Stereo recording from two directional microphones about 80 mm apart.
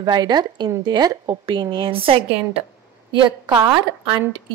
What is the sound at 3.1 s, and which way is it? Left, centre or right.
Speech, right.